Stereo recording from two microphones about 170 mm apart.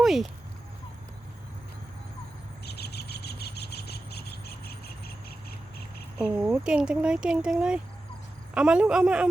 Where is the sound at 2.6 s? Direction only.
70° left (ahead or behind).